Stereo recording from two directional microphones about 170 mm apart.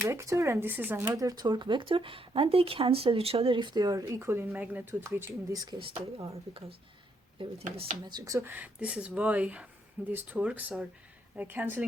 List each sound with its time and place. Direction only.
0.0 s speech: 15° right (ahead or behind)
5.8 s speech: 30° right (ahead or behind)
8.0 s speech: 20° right (ahead or behind)